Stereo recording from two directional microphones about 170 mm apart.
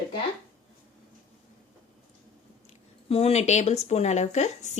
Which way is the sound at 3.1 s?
35° left (ahead or behind).